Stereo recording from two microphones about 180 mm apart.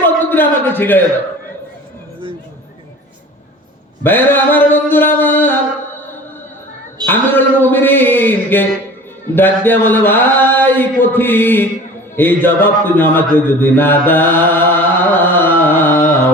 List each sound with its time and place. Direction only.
0.0 s a sound: 10° left (ahead or behind)
4.0 s mantra: 10° left (ahead or behind)
7.0 s a man's voice: 10° left (ahead or behind)
15.2 s carnatic music: 10° left (ahead or behind)